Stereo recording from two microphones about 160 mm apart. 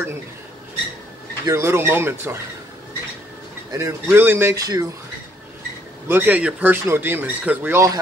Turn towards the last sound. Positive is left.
turn(degrees=-20)  # may be behind; listen again after turning